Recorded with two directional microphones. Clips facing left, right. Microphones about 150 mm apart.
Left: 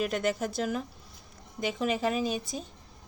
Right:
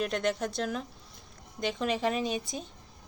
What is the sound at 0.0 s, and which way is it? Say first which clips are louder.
A woman's voice: left 1 dB; 5° left (ahead or behind).